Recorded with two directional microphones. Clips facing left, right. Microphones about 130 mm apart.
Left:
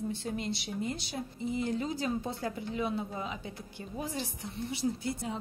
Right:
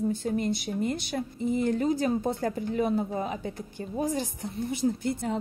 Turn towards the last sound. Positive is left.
turn(degrees=-50)  # may be behind; listen again after turning